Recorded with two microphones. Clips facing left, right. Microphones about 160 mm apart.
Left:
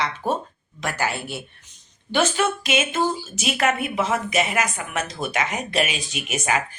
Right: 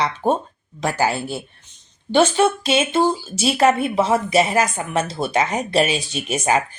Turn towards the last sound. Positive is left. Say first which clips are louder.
# right 5 dB
turn(degrees=-30)  # may be behind; listen again after turning